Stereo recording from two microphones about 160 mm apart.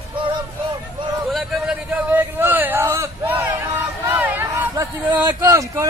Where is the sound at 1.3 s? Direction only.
Centre (ahead or behind).